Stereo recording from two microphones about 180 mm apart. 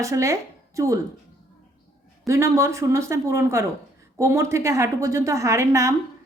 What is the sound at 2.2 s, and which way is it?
A woman's voice, 15° right (ahead or behind).